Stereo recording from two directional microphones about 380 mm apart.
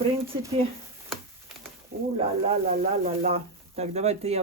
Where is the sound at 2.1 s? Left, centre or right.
Centre.